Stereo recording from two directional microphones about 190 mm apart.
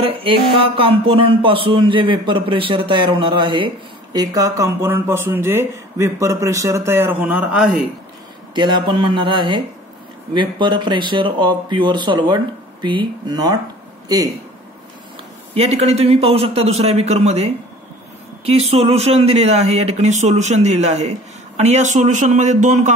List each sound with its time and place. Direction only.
0.0 s speech: 30° right (ahead or behind); by 7.9 s 5° right (ahead or behind)
8.5 s speech: 25° right (ahead or behind)
15.5 s speech: 30° right (ahead or behind)